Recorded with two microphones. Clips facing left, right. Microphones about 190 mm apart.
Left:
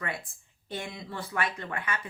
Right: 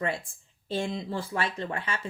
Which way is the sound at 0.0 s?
25° right (ahead or behind).